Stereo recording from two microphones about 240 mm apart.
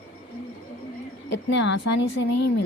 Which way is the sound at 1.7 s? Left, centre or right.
Left.